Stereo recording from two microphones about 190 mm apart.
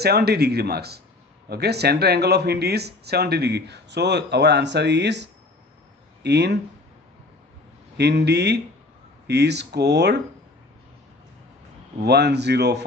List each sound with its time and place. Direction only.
0.0 s speech: 55° right (ahead or behind)
8.0 s speech: 60° right (ahead or behind)
12.0 s speech: 60° right (ahead or behind)